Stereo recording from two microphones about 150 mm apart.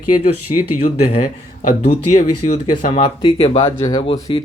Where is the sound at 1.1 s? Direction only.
60° left (ahead or behind).